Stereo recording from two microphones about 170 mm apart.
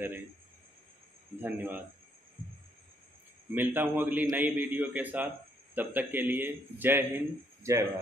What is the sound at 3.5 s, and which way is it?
Speech, 10° right (ahead or behind).